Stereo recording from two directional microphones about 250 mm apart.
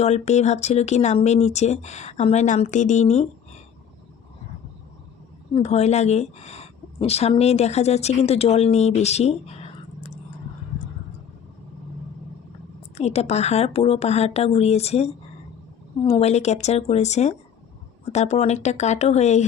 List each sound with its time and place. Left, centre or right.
0.0 s speech: left
5.5 s a woman's voice: left
13.0 s speech: left